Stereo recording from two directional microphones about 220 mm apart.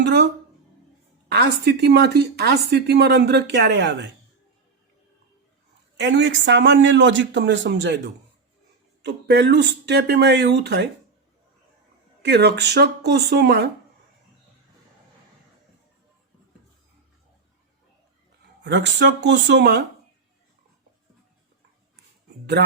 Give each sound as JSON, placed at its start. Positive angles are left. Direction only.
{"t": 0.0, "sound": "speech", "side_deg": -50}
{"t": 1.3, "sound": "speech", "side_deg": -50}
{"t": 6.0, "sound": "speech", "side_deg": -55}
{"t": 12.2, "sound": "speech", "side_deg": -50}
{"t": 18.6, "sound": "speech", "side_deg": -55}